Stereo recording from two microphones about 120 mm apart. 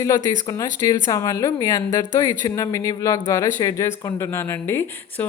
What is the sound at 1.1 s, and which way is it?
Speech, 30° left (ahead or behind).